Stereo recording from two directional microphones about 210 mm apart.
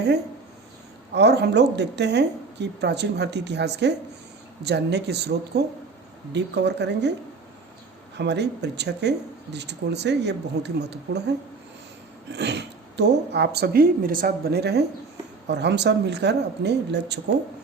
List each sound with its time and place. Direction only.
1.1 s speech: 55° right (ahead or behind)
8.2 s speech: 55° right (ahead or behind)
12.3 s speech: 55° right (ahead or behind)